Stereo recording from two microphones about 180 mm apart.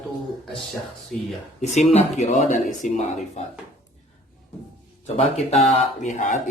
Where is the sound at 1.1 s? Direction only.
5° left (ahead or behind).